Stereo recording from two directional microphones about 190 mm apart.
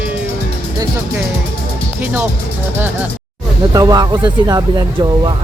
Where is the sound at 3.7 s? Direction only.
20° right (ahead or behind).